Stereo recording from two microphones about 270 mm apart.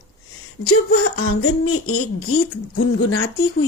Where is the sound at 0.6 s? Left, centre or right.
Left.